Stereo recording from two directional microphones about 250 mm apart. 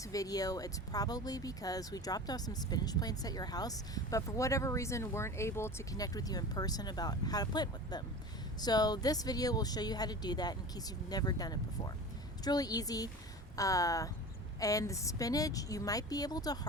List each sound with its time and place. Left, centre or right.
0.1 s speech: centre